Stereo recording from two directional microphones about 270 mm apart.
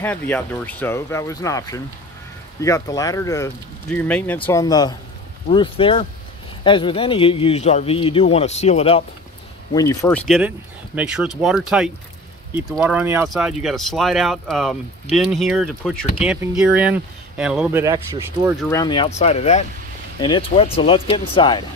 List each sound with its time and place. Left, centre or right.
0.0 s speech: centre; by 9.0 s left
9.8 s speech: centre
18.7 s speech: centre